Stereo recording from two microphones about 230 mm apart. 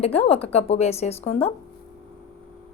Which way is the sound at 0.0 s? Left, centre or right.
Left.